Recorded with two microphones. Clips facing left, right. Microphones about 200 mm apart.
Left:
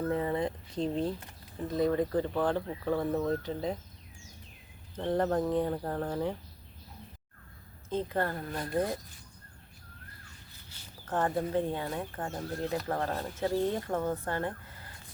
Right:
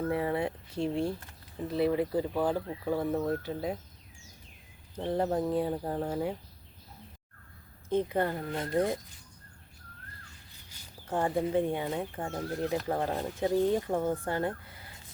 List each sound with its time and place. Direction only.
0.1 s speech: 10° right (ahead or behind)
4.9 s speech: 10° right (ahead or behind)
7.9 s speech: 15° right (ahead or behind)
10.7 s speech: 10° right (ahead or behind)